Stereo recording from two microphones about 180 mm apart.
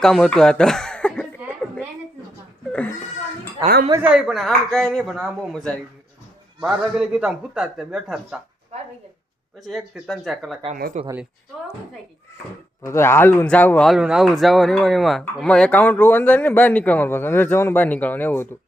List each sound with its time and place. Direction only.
0.0 s speech: centre (ahead or behind)
1.4 s a sound: 10° right (ahead or behind)
3.9 s a man's voice: 5° right (ahead or behind)
9.6 s a man's voice: centre (ahead or behind)
11.0 s speech: 40° right (ahead or behind)
12.8 s speech: 15° left (ahead or behind)